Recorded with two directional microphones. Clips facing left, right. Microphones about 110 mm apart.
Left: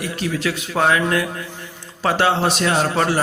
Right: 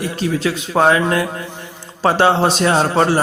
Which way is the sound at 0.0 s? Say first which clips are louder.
Right 4 dB; 30° right (ahead or behind).